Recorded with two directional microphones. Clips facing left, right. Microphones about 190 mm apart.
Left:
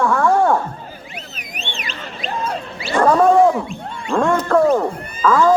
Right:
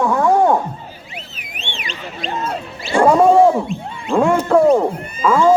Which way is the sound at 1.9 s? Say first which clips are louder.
Right 2 dB; centre (ahead or behind).